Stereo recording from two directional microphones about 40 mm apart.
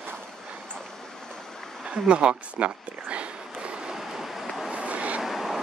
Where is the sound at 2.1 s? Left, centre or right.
Right.